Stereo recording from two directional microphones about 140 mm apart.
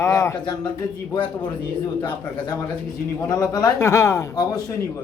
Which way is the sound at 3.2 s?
25° left (ahead or behind).